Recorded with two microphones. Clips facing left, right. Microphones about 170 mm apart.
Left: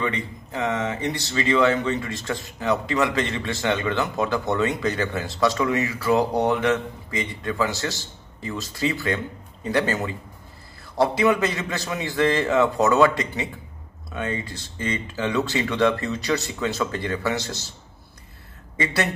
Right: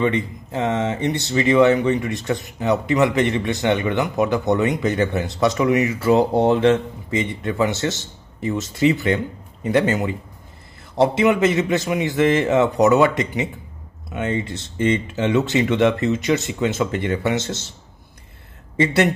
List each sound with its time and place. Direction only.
0.0 s speech: 25° right (ahead or behind)